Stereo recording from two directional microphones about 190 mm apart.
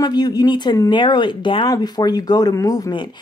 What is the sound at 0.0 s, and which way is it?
Speech, 20° left (ahead or behind).